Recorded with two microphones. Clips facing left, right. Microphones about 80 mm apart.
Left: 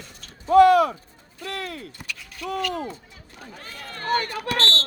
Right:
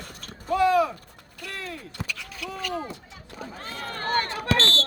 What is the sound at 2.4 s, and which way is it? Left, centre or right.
Speech, right.